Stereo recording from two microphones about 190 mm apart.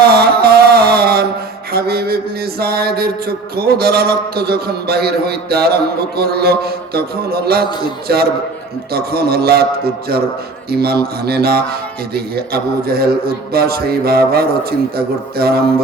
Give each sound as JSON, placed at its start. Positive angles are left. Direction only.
{"t": 0.1, "sound": "music", "side_deg": -55}
{"t": 1.7, "sound": "mantra", "side_deg": -55}
{"t": 10.7, "sound": "mantra", "side_deg": -55}